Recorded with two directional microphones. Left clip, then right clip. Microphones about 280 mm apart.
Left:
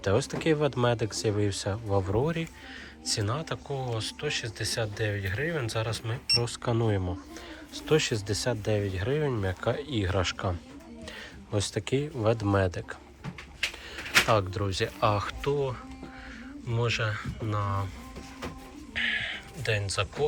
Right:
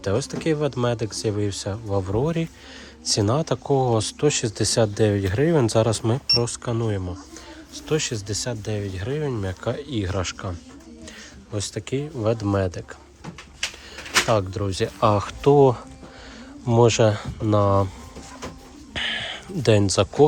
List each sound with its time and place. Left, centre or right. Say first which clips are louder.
0.0 s speech: right 3 dB; centre
6.2 s speech: right 2 dB; centre
18.9 s a sound: right 2 dB; right